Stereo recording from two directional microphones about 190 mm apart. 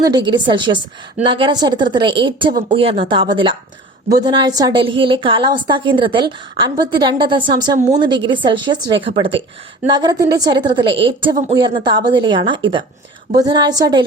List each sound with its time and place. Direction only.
0.0 s a woman's voice: 20° right (ahead or behind)